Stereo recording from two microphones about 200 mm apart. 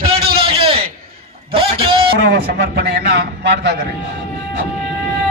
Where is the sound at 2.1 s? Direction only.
50° right (ahead or behind).